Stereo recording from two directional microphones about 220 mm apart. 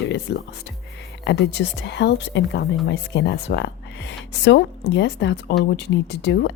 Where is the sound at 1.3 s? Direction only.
50° left (ahead or behind).